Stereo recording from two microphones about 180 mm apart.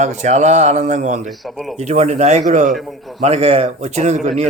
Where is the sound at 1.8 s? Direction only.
40° right (ahead or behind).